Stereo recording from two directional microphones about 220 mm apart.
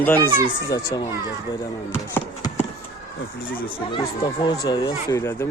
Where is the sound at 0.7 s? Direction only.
15° left (ahead or behind).